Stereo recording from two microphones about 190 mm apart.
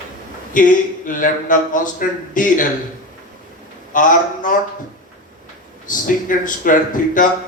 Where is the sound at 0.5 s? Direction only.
45° left (ahead or behind).